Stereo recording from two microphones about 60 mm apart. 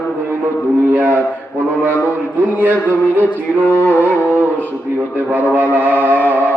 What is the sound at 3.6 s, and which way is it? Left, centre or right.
Music, left.